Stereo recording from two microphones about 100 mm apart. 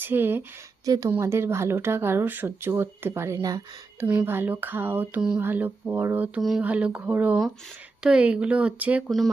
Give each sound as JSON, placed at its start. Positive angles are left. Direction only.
{"t": 0.0, "sound": "speech", "side_deg": -20}
{"t": 0.9, "sound": "speech", "side_deg": -35}
{"t": 4.0, "sound": "speech", "side_deg": -15}
{"t": 6.6, "sound": "speech", "side_deg": -15}
{"t": 9.0, "sound": "speech", "side_deg": 0}